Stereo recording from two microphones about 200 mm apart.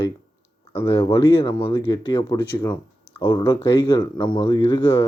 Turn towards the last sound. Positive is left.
turn(degrees=15)  # may be behind; listen again after turning